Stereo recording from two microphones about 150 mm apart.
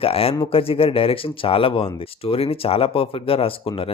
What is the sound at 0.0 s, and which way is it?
Speech, 40° left (ahead or behind).